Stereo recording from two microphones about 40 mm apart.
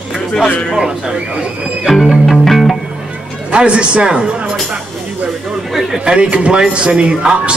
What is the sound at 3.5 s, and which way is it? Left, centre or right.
Speech, right.